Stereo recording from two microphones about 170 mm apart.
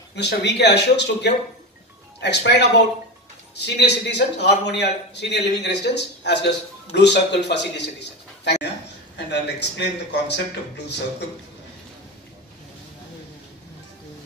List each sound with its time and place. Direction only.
0.1 s a man's voice: 85° left